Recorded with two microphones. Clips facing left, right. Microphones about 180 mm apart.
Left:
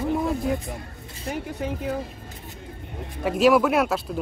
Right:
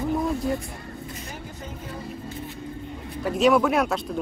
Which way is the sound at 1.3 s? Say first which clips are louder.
Left 9 dB; 70° left (ahead or behind).